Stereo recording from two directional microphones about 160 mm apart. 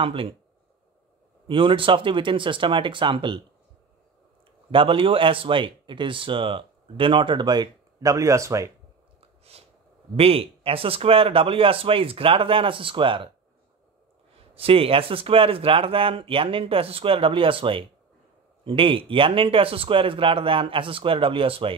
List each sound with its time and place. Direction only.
0.0 s a man's voice: 35° right (ahead or behind)
1.5 s a man's voice: 30° right (ahead or behind)
4.6 s a man's voice: 35° right (ahead or behind)
9.2 s a sound: 40° right (ahead or behind)
10.1 s a man's voice: 35° right (ahead or behind)
14.5 s a man's voice: 35° right (ahead or behind)